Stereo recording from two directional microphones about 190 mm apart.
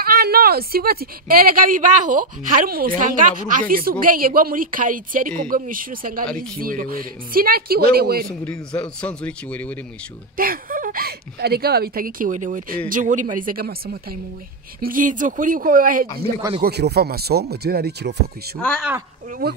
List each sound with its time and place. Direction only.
0.0 s speech: 50° right (ahead or behind)
8.3 s a man's voice: 5° left (ahead or behind)
10.3 s speech: 50° right (ahead or behind)
16.6 s speech: 60° right (ahead or behind)
18.6 s a man's voice: 5° left (ahead or behind)
19.4 s speech: 55° right (ahead or behind)